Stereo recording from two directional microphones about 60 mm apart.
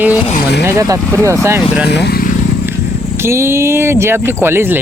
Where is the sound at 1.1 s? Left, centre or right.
Right.